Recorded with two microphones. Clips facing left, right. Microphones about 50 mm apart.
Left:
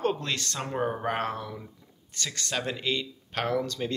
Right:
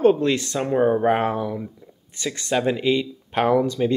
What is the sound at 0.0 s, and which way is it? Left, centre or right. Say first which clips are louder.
Speech: right 11 dB; centre.